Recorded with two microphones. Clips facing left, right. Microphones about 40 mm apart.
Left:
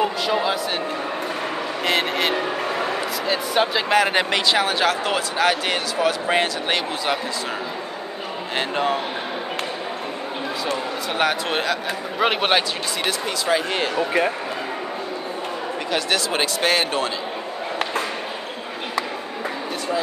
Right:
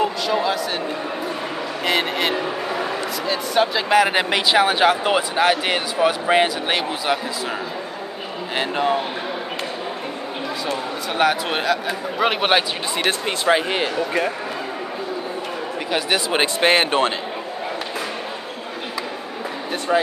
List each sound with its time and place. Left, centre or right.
0.0 s a sound: centre
1.9 s a man's voice: centre
8.5 s a man's voice: centre
11.1 s a man's voice: centre
13.5 s speech: right
13.9 s speech: centre
15.9 s speech: centre